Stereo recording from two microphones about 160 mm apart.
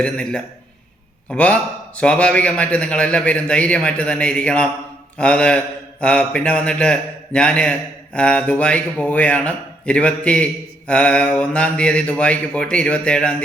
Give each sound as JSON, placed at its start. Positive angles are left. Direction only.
{"t": 0.0, "sound": "a man's voice", "side_deg": 5}